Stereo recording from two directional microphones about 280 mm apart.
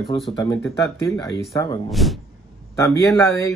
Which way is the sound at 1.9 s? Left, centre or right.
Centre.